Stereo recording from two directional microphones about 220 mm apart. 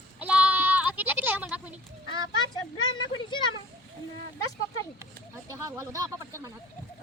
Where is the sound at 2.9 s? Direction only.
20° left (ahead or behind).